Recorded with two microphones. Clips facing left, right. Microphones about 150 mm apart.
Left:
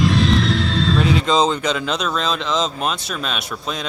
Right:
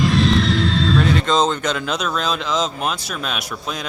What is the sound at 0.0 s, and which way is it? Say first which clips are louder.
Speech: even; centre (ahead or behind).